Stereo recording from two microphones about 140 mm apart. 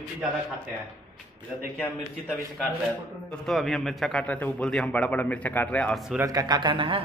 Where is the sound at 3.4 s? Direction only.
Centre (ahead or behind).